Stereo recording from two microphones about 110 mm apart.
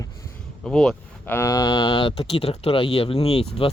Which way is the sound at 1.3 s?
25° left (ahead or behind).